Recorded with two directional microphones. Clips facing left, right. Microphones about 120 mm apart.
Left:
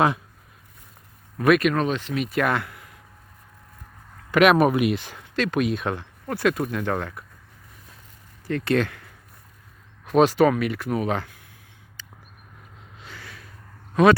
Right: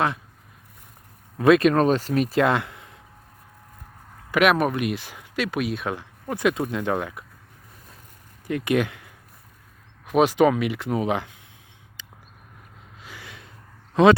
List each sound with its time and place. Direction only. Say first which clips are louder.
1.4 s speech: right 3 dB; 25° right (ahead or behind)
2.4 s a sound: right 3 dB; 20° right (ahead or behind)
4.4 s speech: left 3 dB; centre (ahead or behind)
6.2 s speech: even; 20° right (ahead or behind)
8.4 s speech: even; 15° right (ahead or behind)
10.1 s speech: left 1 dB; 15° right (ahead or behind)
12.0 s a sound: left 1 dB; 15° right (ahead or behind)
13.0 s snort: even; 15° right (ahead or behind)
13.9 s speech: right 1 dB; 20° right (ahead or behind)